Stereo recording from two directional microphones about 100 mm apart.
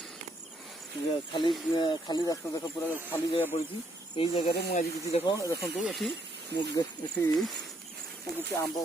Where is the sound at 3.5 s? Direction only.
90° left.